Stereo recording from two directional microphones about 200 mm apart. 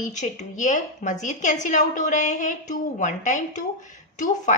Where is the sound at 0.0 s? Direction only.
40° left (ahead or behind).